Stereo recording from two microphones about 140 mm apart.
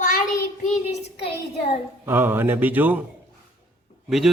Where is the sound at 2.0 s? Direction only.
15° right (ahead or behind).